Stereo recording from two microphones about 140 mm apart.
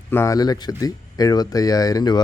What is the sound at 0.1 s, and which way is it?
Speech, 20° left (ahead or behind).